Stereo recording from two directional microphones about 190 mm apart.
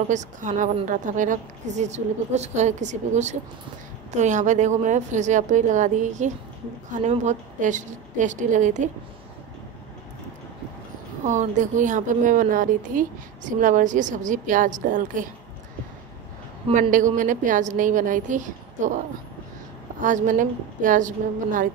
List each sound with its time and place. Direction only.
0.1 s a woman's voice: 40° right (ahead or behind)
11.2 s a woman's voice: 40° right (ahead or behind)
16.9 s a woman's voice: 45° right (ahead or behind)
20.0 s a woman's voice: 40° right (ahead or behind)